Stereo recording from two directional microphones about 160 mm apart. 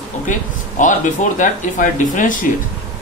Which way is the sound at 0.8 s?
55° left (ahead or behind).